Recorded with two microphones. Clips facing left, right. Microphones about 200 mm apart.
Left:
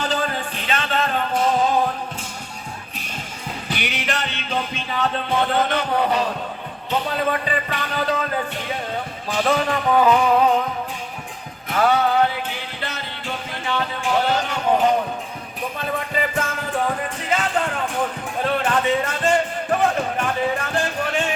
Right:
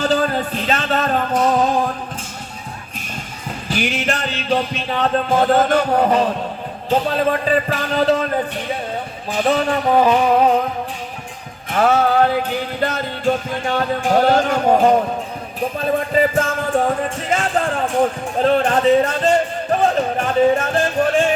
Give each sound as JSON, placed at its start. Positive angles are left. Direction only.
{"t": 0.0, "sound": "music", "side_deg": -40}
{"t": 3.8, "sound": "music", "side_deg": -40}
{"t": 9.4, "sound": "music", "side_deg": -25}
{"t": 11.7, "sound": "music", "side_deg": -45}
{"t": 19.8, "sound": "music", "side_deg": -25}